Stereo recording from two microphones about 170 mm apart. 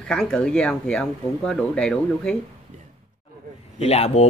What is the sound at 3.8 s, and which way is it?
Speech, 40° left (ahead or behind).